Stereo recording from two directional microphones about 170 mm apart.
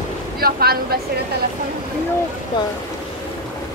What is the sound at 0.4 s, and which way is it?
Speech, 65° right (ahead or behind).